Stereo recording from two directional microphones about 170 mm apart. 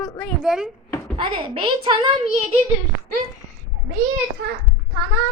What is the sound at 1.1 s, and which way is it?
Speech, 35° right (ahead or behind).